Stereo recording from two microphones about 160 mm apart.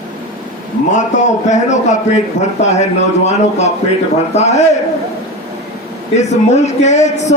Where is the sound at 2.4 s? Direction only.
90° left.